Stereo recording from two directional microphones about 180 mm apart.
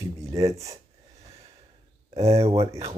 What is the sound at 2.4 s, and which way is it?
Speech, 35° right (ahead or behind).